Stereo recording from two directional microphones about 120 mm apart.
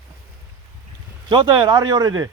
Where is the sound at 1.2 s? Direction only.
35° right (ahead or behind).